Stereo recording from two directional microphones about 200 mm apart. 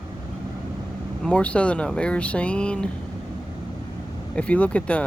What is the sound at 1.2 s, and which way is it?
Speech, 5° left (ahead or behind).